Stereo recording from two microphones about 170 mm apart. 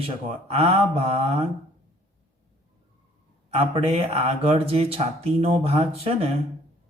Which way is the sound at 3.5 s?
35° right (ahead or behind).